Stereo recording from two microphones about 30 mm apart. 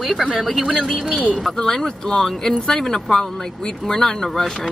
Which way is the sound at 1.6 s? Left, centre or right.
Centre.